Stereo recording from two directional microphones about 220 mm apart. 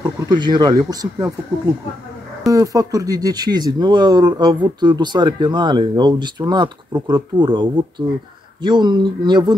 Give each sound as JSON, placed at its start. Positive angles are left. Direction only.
{"t": 0.0, "sound": "speech", "side_deg": -20}
{"t": 2.5, "sound": "speech", "side_deg": -15}